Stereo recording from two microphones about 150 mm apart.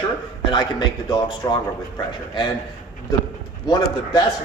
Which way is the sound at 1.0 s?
30° left (ahead or behind).